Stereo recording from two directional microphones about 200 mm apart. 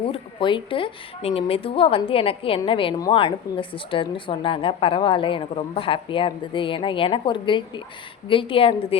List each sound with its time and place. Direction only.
0.0 s a woman's voice: 25° left (ahead or behind)